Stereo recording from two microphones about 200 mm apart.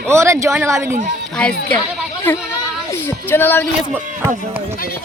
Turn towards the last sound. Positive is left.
turn(degrees=-10)  # may be behind; listen again after turning